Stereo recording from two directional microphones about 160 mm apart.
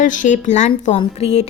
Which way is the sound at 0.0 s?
55° left (ahead or behind).